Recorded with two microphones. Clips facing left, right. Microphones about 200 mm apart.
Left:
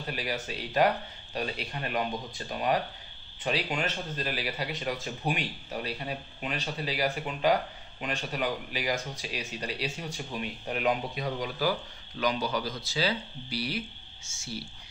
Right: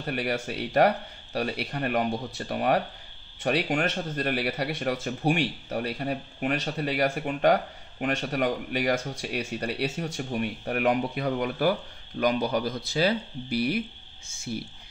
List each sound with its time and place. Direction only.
0.0 s speech: 60° right (ahead or behind)